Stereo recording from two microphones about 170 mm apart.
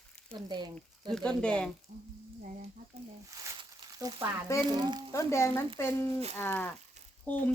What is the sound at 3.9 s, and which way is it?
Speech, 20° right (ahead or behind).